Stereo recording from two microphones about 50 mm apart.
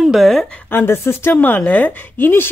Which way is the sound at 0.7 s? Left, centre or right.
Left.